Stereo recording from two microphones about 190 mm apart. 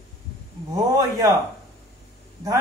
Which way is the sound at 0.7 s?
15° right (ahead or behind).